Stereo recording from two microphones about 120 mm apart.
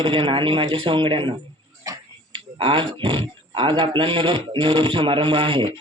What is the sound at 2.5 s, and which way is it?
Speech, 50° right (ahead or behind).